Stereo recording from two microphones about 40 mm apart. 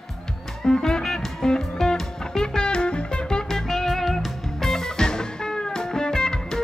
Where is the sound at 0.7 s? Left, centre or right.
Centre.